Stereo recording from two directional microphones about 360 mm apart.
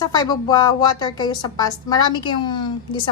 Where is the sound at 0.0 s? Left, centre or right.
Centre.